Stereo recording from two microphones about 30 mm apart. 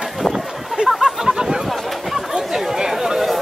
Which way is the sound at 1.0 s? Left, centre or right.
Centre.